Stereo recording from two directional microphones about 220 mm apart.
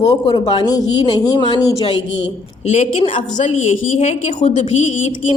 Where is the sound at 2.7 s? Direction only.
30° left (ahead or behind).